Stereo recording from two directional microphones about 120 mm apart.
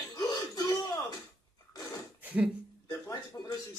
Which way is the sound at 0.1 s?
30° left (ahead or behind).